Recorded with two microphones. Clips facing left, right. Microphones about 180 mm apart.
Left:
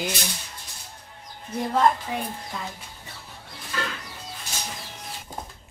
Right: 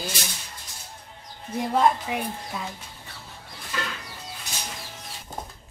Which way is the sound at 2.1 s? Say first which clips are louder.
Right 1 dB; 5° right (ahead or behind).